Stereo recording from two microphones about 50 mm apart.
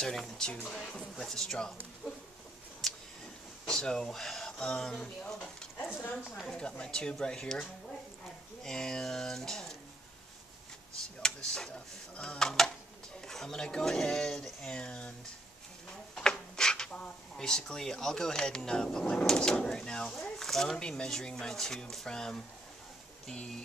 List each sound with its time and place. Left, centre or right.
0.0 s speech: centre
3.6 s speech: centre
6.4 s speech: centre
8.6 s speech: centre
11.2 s speech: centre
14.8 s speech: left
16.2 s drawer open or close: centre
17.5 s speech: centre